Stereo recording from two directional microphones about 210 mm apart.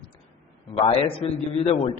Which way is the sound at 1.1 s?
30° left (ahead or behind).